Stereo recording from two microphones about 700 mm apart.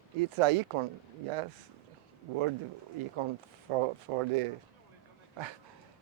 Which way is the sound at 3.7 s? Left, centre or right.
Right.